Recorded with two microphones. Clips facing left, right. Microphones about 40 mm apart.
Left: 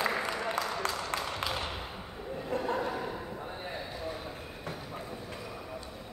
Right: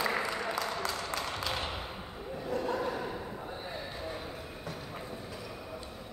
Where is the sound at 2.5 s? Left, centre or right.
Left.